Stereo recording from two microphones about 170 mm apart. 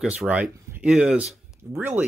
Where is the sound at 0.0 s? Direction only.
5° right (ahead or behind).